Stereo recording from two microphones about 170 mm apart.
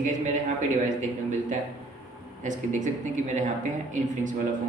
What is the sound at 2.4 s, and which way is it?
A man's voice, 45° right (ahead or behind).